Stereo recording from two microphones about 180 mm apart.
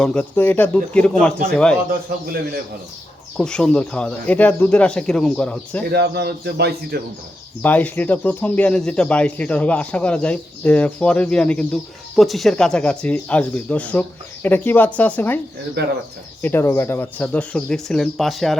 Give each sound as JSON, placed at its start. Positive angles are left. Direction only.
{"t": 0.0, "sound": "speech", "side_deg": 5}
{"t": 3.3, "sound": "speech", "side_deg": 5}
{"t": 5.8, "sound": "a man's voice", "side_deg": -65}
{"t": 7.6, "sound": "speech", "side_deg": 10}
{"t": 15.8, "sound": "a man's voice", "side_deg": -65}
{"t": 16.4, "sound": "speech", "side_deg": 15}